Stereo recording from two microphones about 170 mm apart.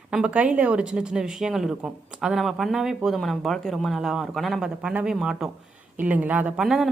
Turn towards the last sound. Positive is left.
turn(degrees=-5)  # may be behind; listen again after turning